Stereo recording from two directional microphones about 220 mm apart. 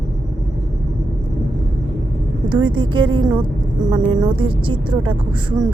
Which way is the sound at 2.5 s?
20° right (ahead or behind).